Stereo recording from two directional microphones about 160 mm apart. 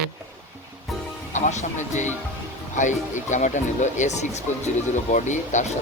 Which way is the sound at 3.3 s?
50° left (ahead or behind).